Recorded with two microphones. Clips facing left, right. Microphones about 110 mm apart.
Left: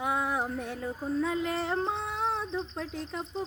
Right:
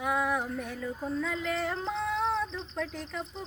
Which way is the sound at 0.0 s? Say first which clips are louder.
Even; 25° left (ahead or behind).